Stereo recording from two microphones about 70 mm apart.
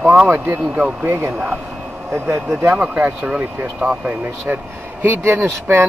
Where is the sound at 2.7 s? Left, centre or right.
Right.